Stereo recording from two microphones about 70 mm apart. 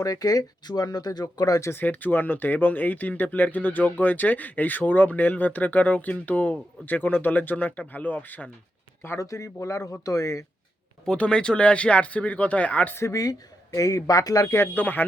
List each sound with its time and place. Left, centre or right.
0.0 s speech: left
1.8 s speech: left
9.0 s speech: left
11.0 s speech: centre
13.0 s speech: left
14.5 s speech: left